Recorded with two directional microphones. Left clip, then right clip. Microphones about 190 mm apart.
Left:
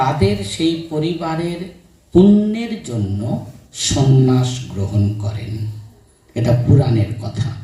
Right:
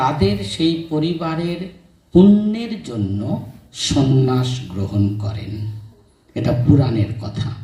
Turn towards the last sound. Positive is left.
turn(degrees=-55)  # may be behind; listen again after turning